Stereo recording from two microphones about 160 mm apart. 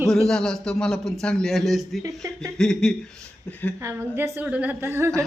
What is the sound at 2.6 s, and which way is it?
Speech, 5° left (ahead or behind).